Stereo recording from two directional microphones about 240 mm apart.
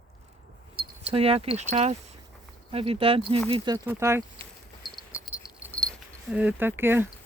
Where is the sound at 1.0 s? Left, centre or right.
Right.